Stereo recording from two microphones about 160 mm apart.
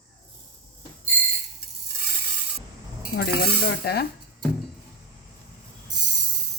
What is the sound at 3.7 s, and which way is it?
Dishes, 80° left.